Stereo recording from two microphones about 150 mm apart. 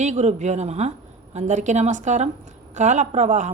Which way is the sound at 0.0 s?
50° right (ahead or behind).